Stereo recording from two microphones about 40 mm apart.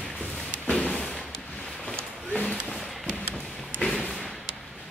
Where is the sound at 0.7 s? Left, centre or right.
Left.